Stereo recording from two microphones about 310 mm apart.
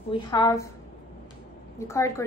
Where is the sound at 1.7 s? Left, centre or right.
Centre.